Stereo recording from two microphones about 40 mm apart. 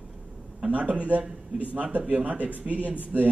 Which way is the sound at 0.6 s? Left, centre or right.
Right.